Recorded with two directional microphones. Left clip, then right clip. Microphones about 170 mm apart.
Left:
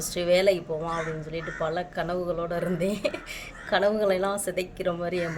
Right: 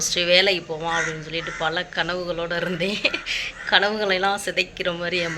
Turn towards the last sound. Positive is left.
turn(degrees=10)  # may be behind; listen again after turning